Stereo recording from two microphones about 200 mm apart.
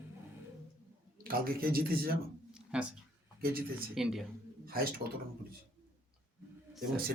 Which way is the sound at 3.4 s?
45° right (ahead or behind).